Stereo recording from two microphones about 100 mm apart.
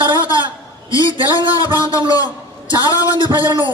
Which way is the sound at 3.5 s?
50° right (ahead or behind).